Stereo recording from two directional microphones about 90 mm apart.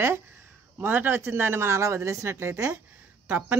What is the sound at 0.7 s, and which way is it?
Speech, 20° right (ahead or behind).